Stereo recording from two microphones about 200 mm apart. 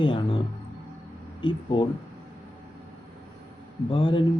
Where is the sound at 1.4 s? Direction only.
25° left (ahead or behind).